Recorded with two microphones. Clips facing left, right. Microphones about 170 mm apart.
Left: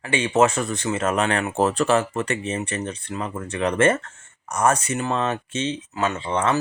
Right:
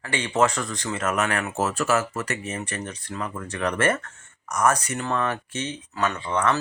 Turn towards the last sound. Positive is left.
turn(degrees=25)  # may be behind; listen again after turning